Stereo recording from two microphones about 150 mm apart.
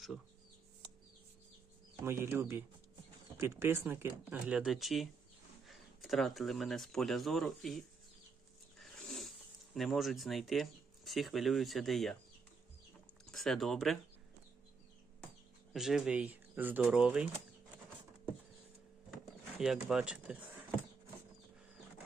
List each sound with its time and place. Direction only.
2.0 s speech: 15° right (ahead or behind); by 7.9 s centre (ahead or behind)
8.8 s wild animals: 5° left (ahead or behind)
9.7 s speech: centre (ahead or behind)
13.2 s speech: centre (ahead or behind)
15.7 s speech: 5° right (ahead or behind)
19.1 s a sound: 5° right (ahead or behind)